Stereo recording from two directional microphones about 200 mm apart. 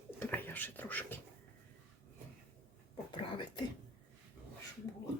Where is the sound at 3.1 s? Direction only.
25° left (ahead or behind).